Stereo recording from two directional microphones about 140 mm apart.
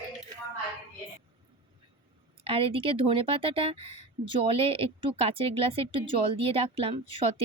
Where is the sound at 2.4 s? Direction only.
40° right (ahead or behind).